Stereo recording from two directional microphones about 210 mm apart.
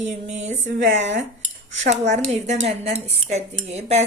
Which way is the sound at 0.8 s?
60° right (ahead or behind).